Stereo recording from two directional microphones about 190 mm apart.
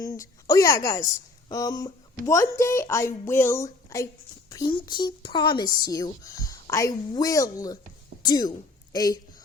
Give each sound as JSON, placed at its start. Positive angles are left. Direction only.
{"t": 0.0, "sound": "a woman's voice", "side_deg": 20}